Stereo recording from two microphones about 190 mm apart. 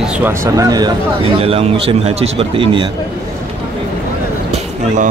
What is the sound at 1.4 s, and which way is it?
Speech, 30° right (ahead or behind).